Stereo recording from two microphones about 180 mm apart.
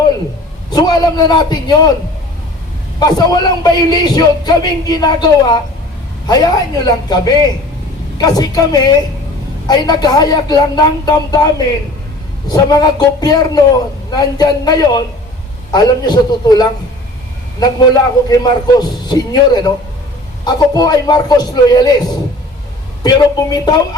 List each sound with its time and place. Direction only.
0.7 s a man's voice: 20° left (ahead or behind)
3.0 s a man's voice: 20° left (ahead or behind)
18.3 s a man's voice: 20° left (ahead or behind)